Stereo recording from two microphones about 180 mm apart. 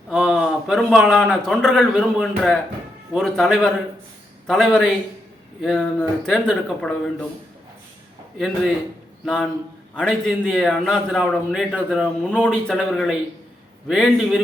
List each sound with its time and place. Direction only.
0.1 s a man's voice: centre (ahead or behind)
9.2 s a man's voice: centre (ahead or behind)